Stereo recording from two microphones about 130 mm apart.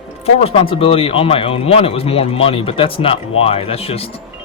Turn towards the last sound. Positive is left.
turn(degrees=50)  # may be behind; listen again after turning